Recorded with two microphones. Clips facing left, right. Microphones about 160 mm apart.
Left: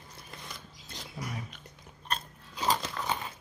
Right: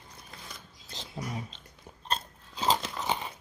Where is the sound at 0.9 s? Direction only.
25° right (ahead or behind).